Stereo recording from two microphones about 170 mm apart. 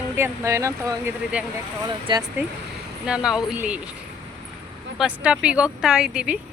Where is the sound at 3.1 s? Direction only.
5° right (ahead or behind).